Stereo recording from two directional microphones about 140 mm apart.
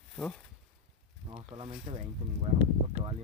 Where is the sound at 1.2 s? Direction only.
35° right (ahead or behind).